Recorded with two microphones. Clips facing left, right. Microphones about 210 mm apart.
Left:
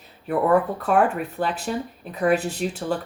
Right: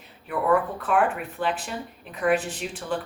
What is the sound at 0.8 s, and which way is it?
Speech, 40° left (ahead or behind).